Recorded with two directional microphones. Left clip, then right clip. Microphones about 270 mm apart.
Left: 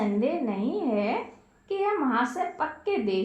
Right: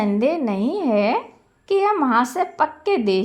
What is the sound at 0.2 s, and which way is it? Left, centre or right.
A woman's voice, right.